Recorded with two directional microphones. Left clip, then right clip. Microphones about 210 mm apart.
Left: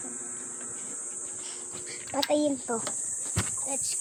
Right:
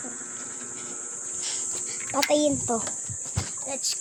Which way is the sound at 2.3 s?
10° right (ahead or behind).